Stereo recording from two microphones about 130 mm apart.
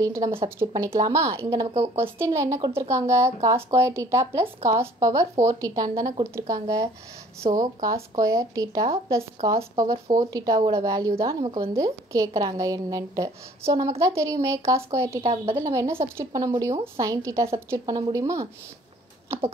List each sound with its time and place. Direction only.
0.0 s speech: 25° right (ahead or behind)